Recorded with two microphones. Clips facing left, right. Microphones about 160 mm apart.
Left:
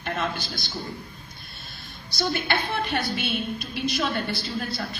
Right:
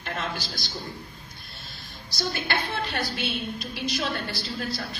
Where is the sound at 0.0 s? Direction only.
55° left (ahead or behind).